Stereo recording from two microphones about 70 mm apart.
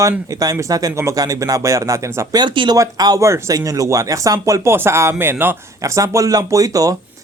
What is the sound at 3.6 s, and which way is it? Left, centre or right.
A man's voice, right.